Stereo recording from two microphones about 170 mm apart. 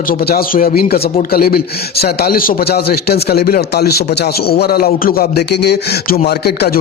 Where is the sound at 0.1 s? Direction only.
60° left (ahead or behind).